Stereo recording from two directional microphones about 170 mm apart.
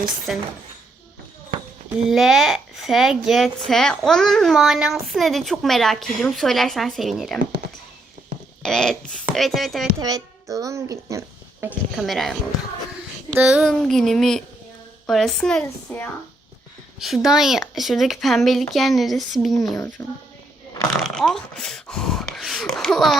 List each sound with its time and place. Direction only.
0.3 s a child's voice: centre (ahead or behind)
2.0 s a child's voice: centre (ahead or behind)
8.6 s a child's voice: 5° left (ahead or behind)
10.0 s a child's voice: 20° right (ahead or behind)
11.9 s a child's voice: centre (ahead or behind)
20.9 s a child's voice: 5° left (ahead or behind)